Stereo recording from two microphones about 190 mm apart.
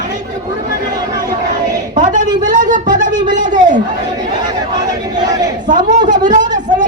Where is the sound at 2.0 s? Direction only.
40° right (ahead or behind).